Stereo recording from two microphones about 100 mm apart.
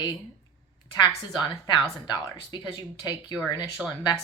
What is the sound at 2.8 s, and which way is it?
Speech, 40° left (ahead or behind).